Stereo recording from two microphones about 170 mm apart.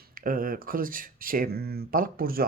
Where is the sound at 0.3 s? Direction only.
55° right (ahead or behind).